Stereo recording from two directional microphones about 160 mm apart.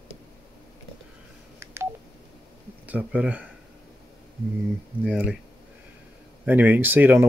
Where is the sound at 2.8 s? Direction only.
10° right (ahead or behind).